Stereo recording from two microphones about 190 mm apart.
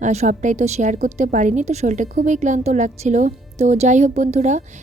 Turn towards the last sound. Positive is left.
turn(degrees=-35)  # may be behind; listen again after turning